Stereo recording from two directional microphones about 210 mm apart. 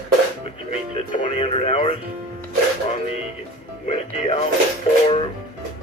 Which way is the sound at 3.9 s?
30° left (ahead or behind).